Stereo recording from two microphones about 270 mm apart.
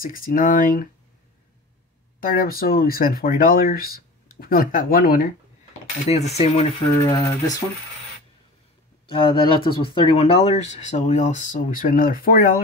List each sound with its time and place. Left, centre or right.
0.0 s speech: left
2.1 s speech: left
7.1 s speech: centre
9.0 s speech: centre